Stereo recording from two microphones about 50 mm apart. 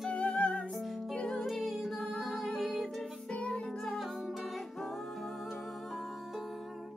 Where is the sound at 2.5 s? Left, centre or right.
Centre.